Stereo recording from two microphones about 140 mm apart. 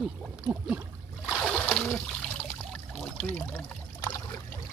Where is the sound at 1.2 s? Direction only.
5° left (ahead or behind).